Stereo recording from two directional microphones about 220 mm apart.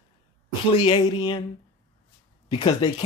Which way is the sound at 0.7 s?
25° left (ahead or behind).